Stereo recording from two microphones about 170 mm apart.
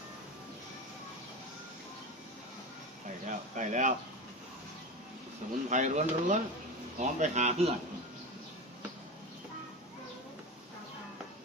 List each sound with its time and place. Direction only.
3.2 s speech: 45° right (ahead or behind)
5.6 s speech: 45° right (ahead or behind)